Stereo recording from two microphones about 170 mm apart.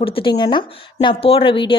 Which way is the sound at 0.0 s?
30° left (ahead or behind).